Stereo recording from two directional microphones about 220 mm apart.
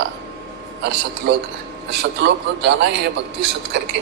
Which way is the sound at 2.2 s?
55° right (ahead or behind).